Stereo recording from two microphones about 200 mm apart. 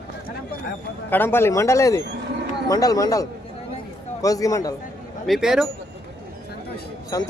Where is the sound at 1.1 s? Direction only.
10° left (ahead or behind).